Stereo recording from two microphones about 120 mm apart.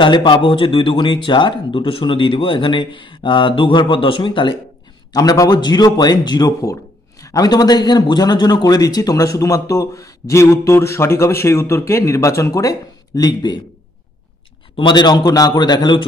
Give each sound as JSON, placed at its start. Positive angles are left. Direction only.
{"t": 0.0, "sound": "speech", "side_deg": 40}
{"t": 5.1, "sound": "speech", "side_deg": 30}
{"t": 14.8, "sound": "a man's voice", "side_deg": 40}